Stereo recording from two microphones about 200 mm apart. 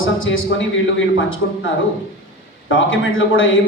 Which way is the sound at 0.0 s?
80° left.